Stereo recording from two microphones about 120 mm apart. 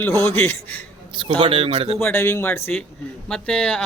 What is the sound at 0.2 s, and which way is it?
Speech, 20° left (ahead or behind).